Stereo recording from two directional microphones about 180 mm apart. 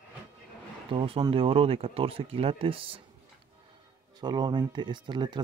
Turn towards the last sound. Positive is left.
turn(degrees=-25)  # may be behind; listen again after turning